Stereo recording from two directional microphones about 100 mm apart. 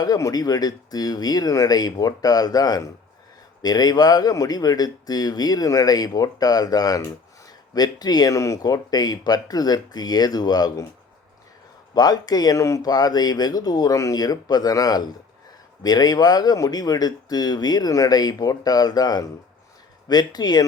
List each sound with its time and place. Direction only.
0.0 s speech: 35° left (ahead or behind)
11.9 s speech: 40° left (ahead or behind)